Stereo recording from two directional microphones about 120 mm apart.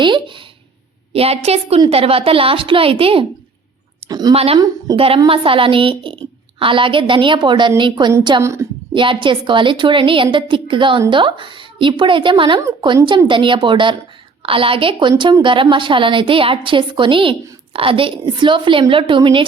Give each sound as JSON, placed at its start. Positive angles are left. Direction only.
{"t": 0.0, "sound": "a sound", "side_deg": -45}
{"t": 1.1, "sound": "a woman's voice", "side_deg": -55}
{"t": 4.1, "sound": "speech", "side_deg": -35}
{"t": 4.9, "sound": "a woman's voice", "side_deg": -50}
{"t": 8.4, "sound": "a woman's voice", "side_deg": -25}
{"t": 8.9, "sound": "a woman's voice", "side_deg": -45}